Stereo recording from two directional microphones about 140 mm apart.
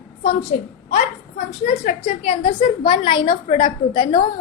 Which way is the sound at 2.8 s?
35° left (ahead or behind).